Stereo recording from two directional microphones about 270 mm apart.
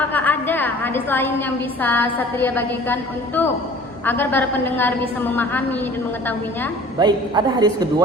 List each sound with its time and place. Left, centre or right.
0.1 s a woman's voice: centre
7.0 s a man's voice: centre